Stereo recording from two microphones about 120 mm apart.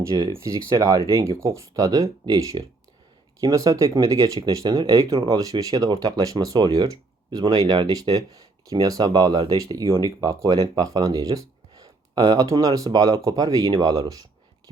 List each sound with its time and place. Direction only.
0.0 s speech: 30° right (ahead or behind)